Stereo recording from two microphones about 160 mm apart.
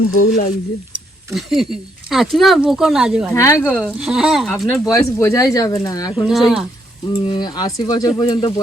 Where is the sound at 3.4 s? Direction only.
15° left (ahead or behind).